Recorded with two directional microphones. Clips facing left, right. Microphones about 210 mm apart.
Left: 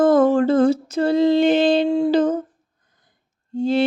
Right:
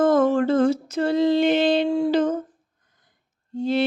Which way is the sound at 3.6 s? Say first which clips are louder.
Left 3 dB; 30° left (ahead or behind).